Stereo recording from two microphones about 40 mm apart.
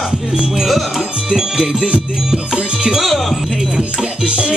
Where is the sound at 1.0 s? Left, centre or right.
Centre.